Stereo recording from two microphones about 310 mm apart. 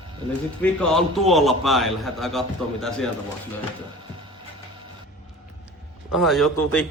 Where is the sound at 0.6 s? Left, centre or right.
Centre.